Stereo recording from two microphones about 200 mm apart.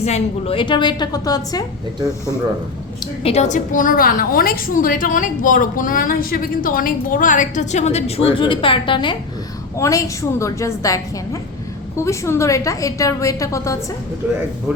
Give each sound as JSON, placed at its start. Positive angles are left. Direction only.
{"t": 0.0, "sound": "a woman's voice", "side_deg": 30}
{"t": 3.2, "sound": "a woman's voice", "side_deg": 35}
{"t": 14.2, "sound": "speech", "side_deg": -10}